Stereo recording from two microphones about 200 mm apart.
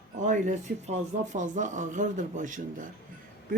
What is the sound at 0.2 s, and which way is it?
Speech, 40° right (ahead or behind).